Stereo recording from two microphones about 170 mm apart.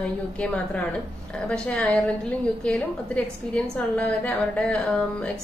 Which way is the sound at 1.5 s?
5° left (ahead or behind).